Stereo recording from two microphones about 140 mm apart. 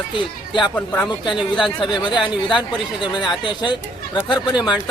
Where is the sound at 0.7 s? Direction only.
15° left (ahead or behind).